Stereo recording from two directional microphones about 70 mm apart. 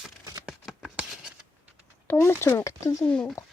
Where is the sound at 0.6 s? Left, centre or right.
Centre.